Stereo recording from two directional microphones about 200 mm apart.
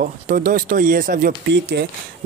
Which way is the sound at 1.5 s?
55° right (ahead or behind).